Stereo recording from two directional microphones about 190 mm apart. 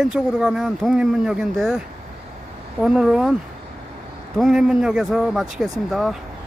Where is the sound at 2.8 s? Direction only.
5° right (ahead or behind).